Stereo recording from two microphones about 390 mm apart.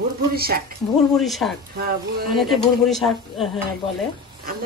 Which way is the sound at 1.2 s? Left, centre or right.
Centre.